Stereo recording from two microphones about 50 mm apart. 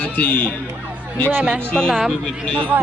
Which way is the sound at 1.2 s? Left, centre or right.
Right.